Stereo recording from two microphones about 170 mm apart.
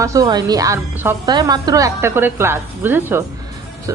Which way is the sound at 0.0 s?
20° right (ahead or behind).